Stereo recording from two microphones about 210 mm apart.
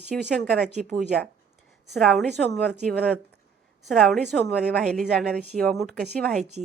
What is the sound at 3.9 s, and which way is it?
Speech, centre (ahead or behind).